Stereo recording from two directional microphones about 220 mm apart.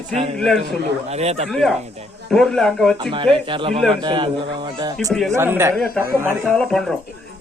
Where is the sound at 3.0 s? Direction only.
20° right (ahead or behind).